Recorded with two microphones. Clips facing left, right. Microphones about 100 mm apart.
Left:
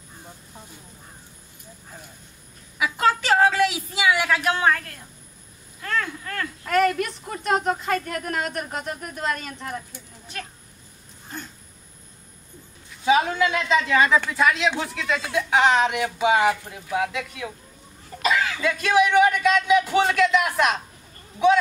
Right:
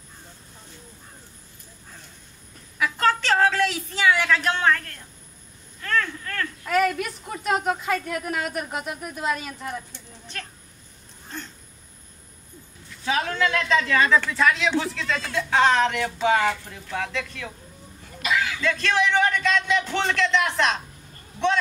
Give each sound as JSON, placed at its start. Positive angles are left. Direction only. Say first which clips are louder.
{"t": 2.8, "sound": "a sound", "louder": "left 1 dB", "side_deg": 10}
{"t": 6.7, "sound": "speech", "louder": "left 2 dB", "side_deg": 0}
{"t": 11.2, "sound": "a sound", "louder": "even", "side_deg": 5}
{"t": 13.0, "sound": "speech", "louder": "left 4 dB", "side_deg": 15}
{"t": 18.2, "sound": "chuckle", "louder": "left 2 dB", "side_deg": 35}
{"t": 18.6, "sound": "speech", "louder": "left 6 dB", "side_deg": 10}